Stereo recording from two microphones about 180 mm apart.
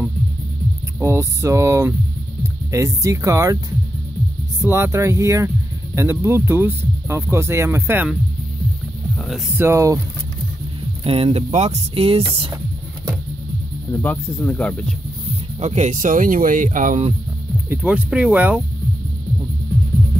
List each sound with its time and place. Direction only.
0.9 s speech: 15° right (ahead or behind)
4.6 s speech: 15° right (ahead or behind)
9.1 s heart sounds: 5° left (ahead or behind)
9.6 s speech: 15° right (ahead or behind)
11.1 s speech: 30° right (ahead or behind)
14.0 s speech: 10° left (ahead or behind)
15.6 s speech: 40° right (ahead or behind)
17.6 s speech: 5° right (ahead or behind)